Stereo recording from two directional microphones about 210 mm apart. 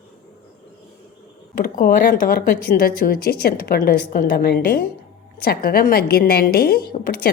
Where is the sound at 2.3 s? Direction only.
45° left (ahead or behind).